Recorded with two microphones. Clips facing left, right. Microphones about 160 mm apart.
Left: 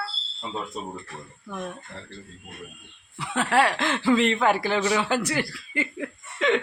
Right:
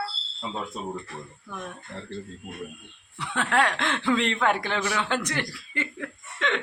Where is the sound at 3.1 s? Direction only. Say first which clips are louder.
Left 2 dB; 5° left (ahead or behind).